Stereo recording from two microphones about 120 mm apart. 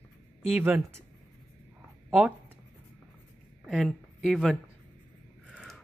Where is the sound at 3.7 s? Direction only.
Centre (ahead or behind).